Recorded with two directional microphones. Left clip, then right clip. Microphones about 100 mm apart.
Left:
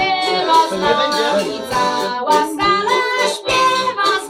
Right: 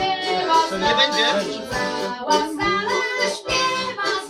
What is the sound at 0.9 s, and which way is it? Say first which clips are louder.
Music: left 2 dB; centre (ahead or behind).